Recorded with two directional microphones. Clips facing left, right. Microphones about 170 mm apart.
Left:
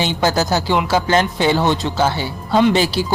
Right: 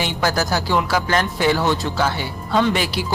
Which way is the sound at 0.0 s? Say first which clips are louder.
Left 3 dB; 25° left (ahead or behind).